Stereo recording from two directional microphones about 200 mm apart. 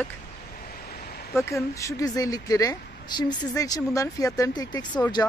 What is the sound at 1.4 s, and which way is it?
A woman's voice, 15° left (ahead or behind).